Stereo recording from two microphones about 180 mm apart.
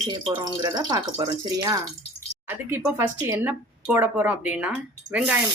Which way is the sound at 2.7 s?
15° right (ahead or behind).